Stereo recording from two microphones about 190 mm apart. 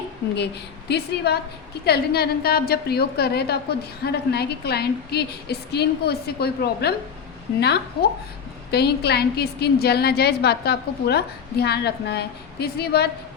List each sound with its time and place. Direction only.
0.9 s a woman's voice: 60° left (ahead or behind)
8.0 s a woman's voice: 55° left (ahead or behind)